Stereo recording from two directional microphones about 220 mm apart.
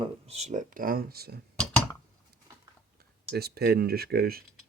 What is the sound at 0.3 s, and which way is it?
Speech, 30° right (ahead or behind).